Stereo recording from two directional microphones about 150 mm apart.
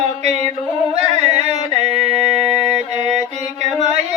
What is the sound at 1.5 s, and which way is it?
Mantra, 45° right (ahead or behind).